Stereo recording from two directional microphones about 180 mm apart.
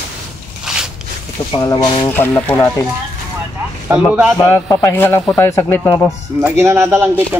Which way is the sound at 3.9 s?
10° right (ahead or behind).